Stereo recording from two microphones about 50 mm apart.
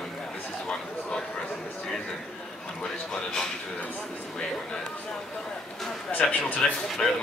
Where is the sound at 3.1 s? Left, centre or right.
Centre.